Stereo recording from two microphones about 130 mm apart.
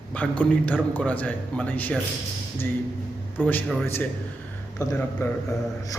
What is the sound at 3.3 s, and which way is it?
Speech, 15° left (ahead or behind).